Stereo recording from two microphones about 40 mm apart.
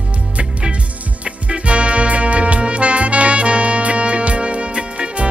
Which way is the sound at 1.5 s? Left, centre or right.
Right.